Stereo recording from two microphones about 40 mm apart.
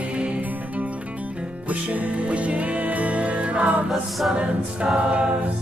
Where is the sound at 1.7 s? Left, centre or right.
Right.